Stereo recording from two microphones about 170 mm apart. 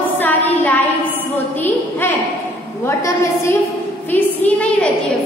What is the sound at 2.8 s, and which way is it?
A woman's voice, 15° left (ahead or behind).